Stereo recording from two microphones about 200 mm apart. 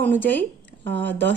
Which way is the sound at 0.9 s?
60° right (ahead or behind).